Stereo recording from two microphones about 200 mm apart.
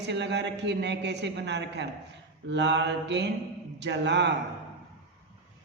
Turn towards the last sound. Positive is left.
turn(degrees=-60)  # may be behind; listen again after turning